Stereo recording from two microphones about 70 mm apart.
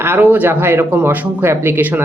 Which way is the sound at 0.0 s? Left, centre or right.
Right.